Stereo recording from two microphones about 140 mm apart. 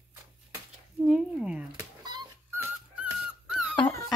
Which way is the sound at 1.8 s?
30° right (ahead or behind).